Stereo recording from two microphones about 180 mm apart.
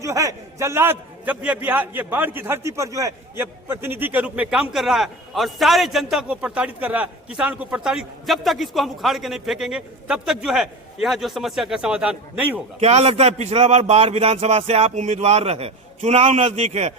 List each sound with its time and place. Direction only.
0.0 s a man's voice: 15° right (ahead or behind)
12.8 s a man's voice: 35° right (ahead or behind)